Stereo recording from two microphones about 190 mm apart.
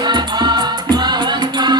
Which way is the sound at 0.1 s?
25° right (ahead or behind).